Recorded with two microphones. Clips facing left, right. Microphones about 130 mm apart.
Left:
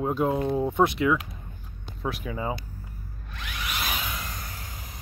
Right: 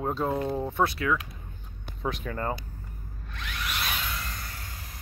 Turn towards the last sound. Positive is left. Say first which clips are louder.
# left 1 dB
turn(degrees=15)  # may be behind; listen again after turning